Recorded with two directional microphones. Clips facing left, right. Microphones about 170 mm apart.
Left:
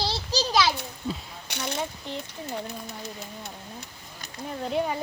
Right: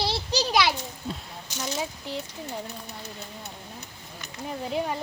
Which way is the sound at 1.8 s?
5° right (ahead or behind).